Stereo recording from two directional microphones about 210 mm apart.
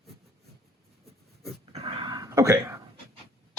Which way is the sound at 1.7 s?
25° right (ahead or behind).